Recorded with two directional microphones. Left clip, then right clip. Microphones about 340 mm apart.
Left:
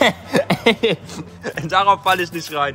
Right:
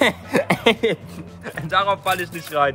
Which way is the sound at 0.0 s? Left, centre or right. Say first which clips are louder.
Left 2 dB; centre.